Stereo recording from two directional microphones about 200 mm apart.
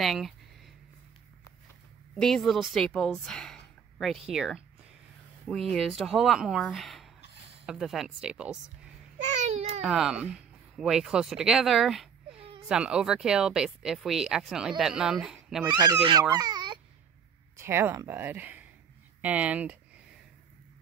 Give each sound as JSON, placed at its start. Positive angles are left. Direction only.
{"t": 0.0, "sound": "speech", "side_deg": 0}
{"t": 2.1, "sound": "a woman's voice", "side_deg": 0}
{"t": 9.2, "sound": "babbling", "side_deg": -35}
{"t": 9.8, "sound": "speech", "side_deg": 0}
{"t": 15.7, "sound": "speech", "side_deg": -20}
{"t": 16.3, "sound": "babbling", "side_deg": -20}
{"t": 17.6, "sound": "speech", "side_deg": -10}